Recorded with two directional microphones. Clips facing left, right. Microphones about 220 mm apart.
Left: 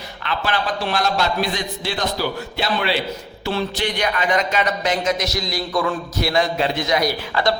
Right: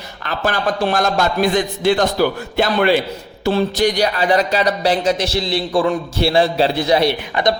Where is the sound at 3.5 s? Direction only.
40° right (ahead or behind).